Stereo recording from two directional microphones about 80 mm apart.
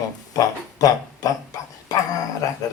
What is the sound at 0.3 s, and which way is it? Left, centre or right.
Speech, left.